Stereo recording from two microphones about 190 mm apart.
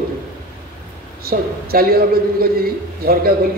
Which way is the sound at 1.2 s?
50° right (ahead or behind).